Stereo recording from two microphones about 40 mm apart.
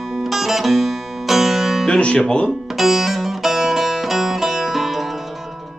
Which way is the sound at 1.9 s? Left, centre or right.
Left.